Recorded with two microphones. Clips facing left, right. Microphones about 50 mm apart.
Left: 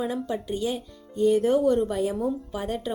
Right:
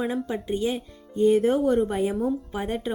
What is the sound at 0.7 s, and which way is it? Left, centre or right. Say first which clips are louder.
A woman's voice: right 1 dB; right.